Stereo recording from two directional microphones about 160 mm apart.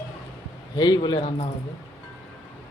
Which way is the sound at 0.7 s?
25° left (ahead or behind).